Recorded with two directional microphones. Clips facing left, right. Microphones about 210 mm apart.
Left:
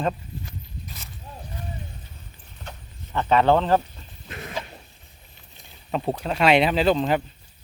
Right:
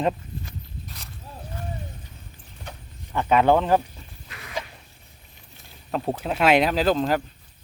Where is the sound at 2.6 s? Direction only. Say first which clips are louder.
Even; 10° right (ahead or behind).